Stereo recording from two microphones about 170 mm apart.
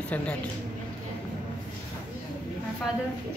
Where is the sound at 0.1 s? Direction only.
10° left (ahead or behind).